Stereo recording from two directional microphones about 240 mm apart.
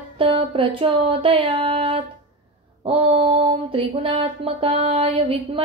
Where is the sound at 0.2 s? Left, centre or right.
Right.